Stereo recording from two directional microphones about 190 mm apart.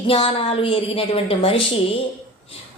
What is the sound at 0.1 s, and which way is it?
A woman's voice, 30° left (ahead or behind).